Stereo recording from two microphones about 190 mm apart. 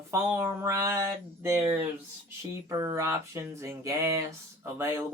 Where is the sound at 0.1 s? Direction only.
15° right (ahead or behind).